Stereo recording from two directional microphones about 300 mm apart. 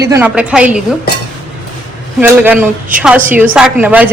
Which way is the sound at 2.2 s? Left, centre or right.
Centre.